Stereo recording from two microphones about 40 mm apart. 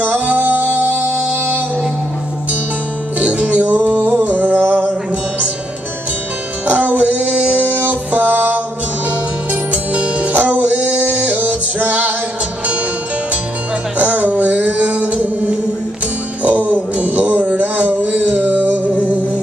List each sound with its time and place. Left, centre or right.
0.0 s music: right
3.2 s music: right
6.7 s music: right
7.3 s a sound: right
7.8 s music: right
13.9 s music: right
16.4 s a sound: right
18.3 s music: right